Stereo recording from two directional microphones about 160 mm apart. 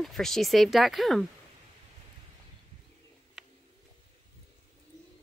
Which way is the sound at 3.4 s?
Centre (ahead or behind).